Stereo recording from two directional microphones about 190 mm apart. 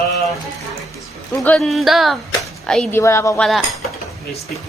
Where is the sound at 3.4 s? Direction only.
Centre (ahead or behind).